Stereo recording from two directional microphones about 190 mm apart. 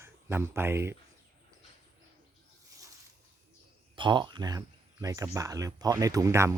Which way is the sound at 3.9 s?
25° right (ahead or behind).